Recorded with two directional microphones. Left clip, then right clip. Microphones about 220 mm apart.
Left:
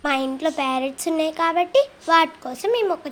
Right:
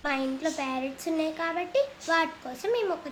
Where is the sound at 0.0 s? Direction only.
30° left (ahead or behind).